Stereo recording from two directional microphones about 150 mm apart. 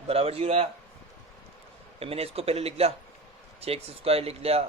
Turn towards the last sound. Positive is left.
turn(degrees=-40)  # may be behind; listen again after turning